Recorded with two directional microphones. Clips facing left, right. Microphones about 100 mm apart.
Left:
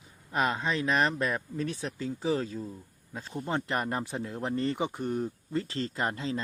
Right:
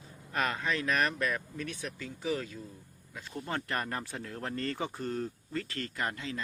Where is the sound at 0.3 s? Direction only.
20° left (ahead or behind).